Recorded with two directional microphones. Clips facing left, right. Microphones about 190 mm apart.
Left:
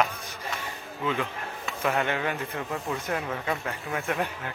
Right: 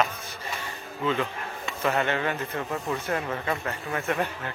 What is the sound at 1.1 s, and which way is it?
A man's voice, 10° left (ahead or behind).